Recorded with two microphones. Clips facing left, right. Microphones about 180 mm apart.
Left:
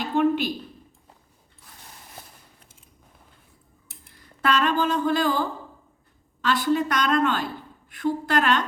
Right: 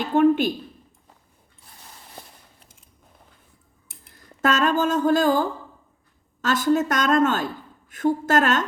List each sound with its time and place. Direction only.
0.0 s a woman's voice: 50° right (ahead or behind)
4.1 s a woman's voice: 45° right (ahead or behind)